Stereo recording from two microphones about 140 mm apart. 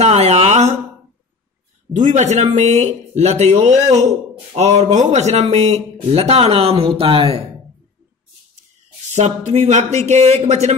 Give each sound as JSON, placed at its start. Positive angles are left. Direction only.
{"t": 0.0, "sound": "a sound", "side_deg": -50}
{"t": 2.0, "sound": "speech", "side_deg": -60}
{"t": 9.1, "sound": "speech", "side_deg": -55}